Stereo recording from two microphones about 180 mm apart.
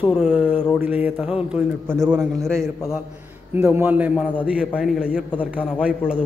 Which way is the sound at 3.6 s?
10° right (ahead or behind).